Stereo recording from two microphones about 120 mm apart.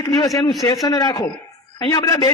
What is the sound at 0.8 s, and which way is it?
A man's voice, 35° left (ahead or behind).